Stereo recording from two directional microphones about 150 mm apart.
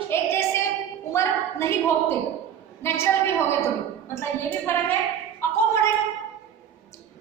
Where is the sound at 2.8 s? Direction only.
15° left (ahead or behind).